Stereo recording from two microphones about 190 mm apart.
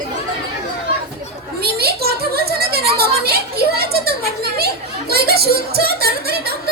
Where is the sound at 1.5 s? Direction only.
55° right (ahead or behind).